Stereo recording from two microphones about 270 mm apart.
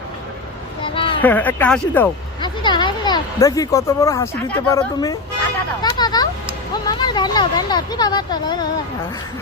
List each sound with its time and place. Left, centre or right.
0.9 s a sound: centre
1.2 s speech: centre
2.4 s speech: centre
5.8 s vehicle: centre
6.8 s speech: centre